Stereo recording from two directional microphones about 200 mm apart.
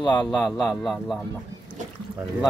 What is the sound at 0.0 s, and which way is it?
Speech, 20° left (ahead or behind).